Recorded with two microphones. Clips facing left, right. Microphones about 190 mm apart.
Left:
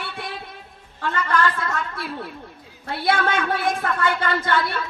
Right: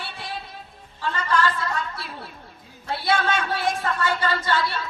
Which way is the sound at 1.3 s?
55° left (ahead or behind).